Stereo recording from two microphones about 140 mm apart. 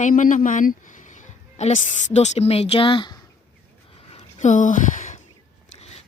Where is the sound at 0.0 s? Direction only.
70° left (ahead or behind); by 3.2 s 35° left (ahead or behind).